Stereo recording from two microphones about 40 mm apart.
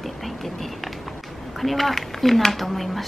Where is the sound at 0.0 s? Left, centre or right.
Centre.